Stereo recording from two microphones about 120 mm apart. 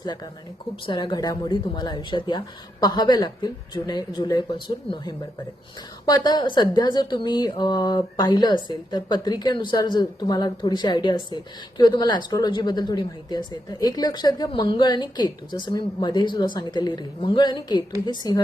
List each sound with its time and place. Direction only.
0.9 s a woman's voice: 45° left (ahead or behind)
6.1 s a woman's voice: 35° left (ahead or behind)